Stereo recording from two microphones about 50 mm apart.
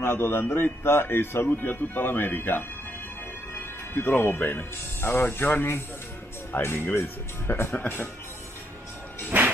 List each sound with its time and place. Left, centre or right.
0.0 s speech: left
7.7 s speech: left